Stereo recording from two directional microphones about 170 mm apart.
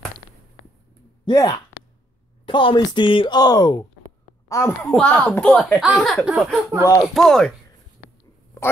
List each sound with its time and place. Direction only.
1.2 s a woman's voice: 25° left (ahead or behind); by 7.5 s 5° left (ahead or behind)